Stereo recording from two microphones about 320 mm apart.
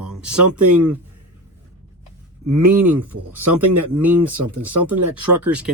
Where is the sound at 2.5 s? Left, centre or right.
Right.